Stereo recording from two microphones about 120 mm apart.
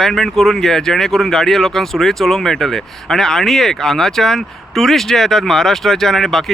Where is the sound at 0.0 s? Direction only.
Centre (ahead or behind).